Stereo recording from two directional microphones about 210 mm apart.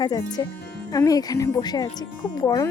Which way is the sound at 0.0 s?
20° left (ahead or behind).